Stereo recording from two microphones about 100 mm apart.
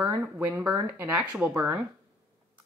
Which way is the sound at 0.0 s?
20° right (ahead or behind).